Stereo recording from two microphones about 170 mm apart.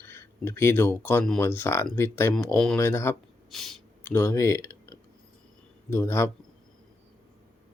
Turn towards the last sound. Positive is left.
turn(degrees=15)  # may be behind; listen again after turning